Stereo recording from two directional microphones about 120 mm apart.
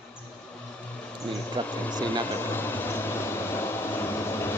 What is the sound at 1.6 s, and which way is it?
Speech, 15° left (ahead or behind).